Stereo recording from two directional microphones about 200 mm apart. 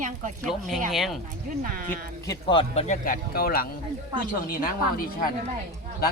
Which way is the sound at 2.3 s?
25° left (ahead or behind).